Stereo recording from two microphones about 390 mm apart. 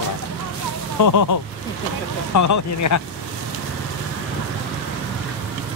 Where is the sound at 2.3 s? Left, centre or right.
Left.